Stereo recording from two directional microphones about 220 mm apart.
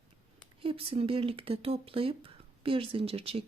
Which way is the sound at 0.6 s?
25° right (ahead or behind).